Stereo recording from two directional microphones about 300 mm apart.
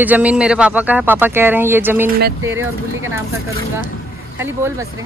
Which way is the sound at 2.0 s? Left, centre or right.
Right.